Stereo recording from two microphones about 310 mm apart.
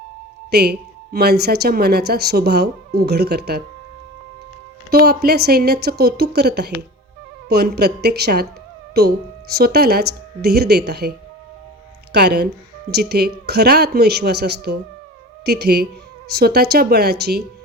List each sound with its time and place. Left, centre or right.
0.5 s speech: right
4.9 s speech: right
12.1 s speech: right